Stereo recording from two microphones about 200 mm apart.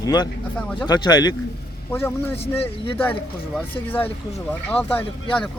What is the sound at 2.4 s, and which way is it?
Speech, 30° left (ahead or behind).